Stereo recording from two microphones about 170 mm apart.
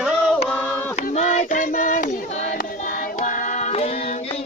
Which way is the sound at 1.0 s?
45° left (ahead or behind).